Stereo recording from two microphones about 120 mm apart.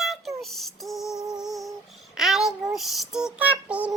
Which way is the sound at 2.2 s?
5° right (ahead or behind).